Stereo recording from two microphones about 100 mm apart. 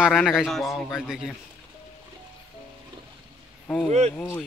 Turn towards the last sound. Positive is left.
turn(degrees=-90)